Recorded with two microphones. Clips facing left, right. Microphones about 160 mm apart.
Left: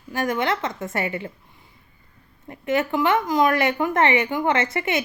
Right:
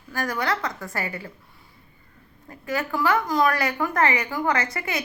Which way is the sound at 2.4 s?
25° left (ahead or behind).